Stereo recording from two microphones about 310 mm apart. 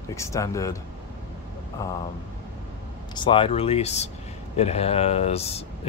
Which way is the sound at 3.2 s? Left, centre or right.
Centre.